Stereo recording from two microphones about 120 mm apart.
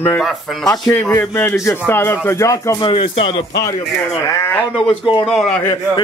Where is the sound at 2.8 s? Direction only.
45° left (ahead or behind).